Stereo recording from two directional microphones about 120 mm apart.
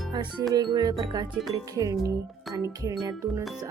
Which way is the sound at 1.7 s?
30° right (ahead or behind).